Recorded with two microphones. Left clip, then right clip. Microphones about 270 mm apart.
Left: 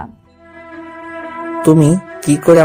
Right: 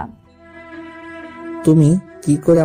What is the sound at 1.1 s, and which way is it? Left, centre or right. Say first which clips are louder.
Music: left 9 dB; left.